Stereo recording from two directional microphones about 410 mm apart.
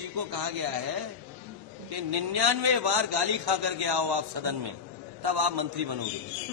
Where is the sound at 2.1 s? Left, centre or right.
Right.